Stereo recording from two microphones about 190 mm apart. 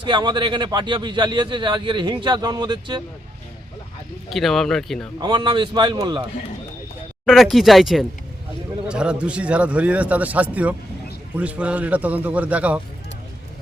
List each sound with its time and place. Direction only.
0.0 s a man's voice: 25° right (ahead or behind)
4.3 s speech: centre (ahead or behind)
5.2 s a man's voice: 25° right (ahead or behind)
7.3 s a man's voice: centre (ahead or behind)